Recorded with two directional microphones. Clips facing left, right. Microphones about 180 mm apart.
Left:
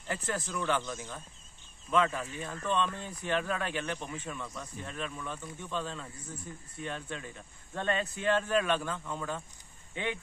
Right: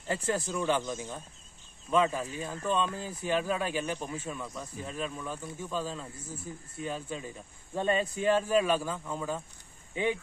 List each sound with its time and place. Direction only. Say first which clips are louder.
0.1 s speech: right 4 dB; 30° right (ahead or behind); by 9.4 s 10° right (ahead or behind)